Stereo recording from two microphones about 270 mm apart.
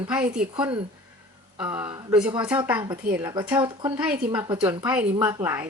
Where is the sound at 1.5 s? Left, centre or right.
Centre.